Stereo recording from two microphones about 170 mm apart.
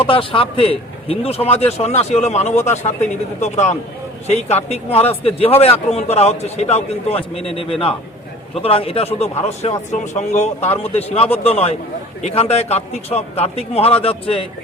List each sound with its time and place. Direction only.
0.0 s a man's voice: 30° left (ahead or behind)
8.6 s a man's voice: 35° left (ahead or behind)